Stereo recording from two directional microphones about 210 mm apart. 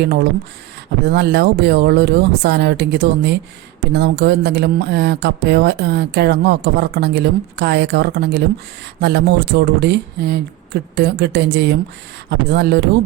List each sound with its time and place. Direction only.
0.0 s speech: 50° right (ahead or behind)